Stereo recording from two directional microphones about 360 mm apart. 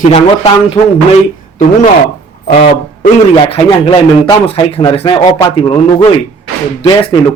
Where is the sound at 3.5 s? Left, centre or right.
Centre.